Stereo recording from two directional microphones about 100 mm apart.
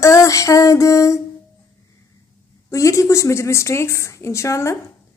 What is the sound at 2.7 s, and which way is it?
A woman's voice, 30° left (ahead or behind).